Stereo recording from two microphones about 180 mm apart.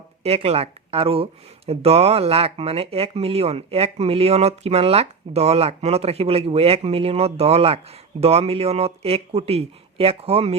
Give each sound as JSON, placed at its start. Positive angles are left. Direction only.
{"t": 0.2, "sound": "speech", "side_deg": -35}